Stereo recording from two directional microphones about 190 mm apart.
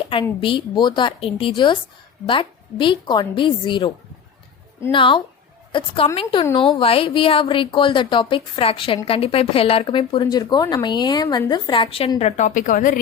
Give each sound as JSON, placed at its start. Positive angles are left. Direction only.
{"t": 0.1, "sound": "speech", "side_deg": 30}